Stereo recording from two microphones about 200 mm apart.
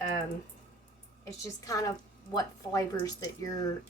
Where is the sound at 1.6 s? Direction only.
20° left (ahead or behind).